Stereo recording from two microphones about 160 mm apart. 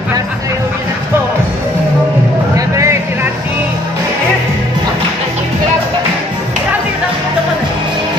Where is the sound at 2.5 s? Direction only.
20° right (ahead or behind).